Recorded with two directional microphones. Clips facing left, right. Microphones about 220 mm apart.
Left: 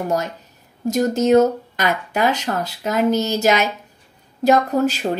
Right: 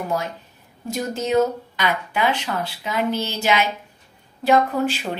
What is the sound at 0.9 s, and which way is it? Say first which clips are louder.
A woman's voice: left 6 dB; 45° left (ahead or behind).